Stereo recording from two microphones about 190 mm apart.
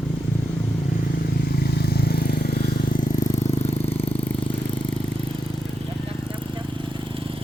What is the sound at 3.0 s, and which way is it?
Vehicle, 45° left (ahead or behind).